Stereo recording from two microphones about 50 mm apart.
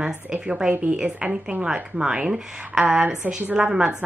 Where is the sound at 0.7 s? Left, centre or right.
Right.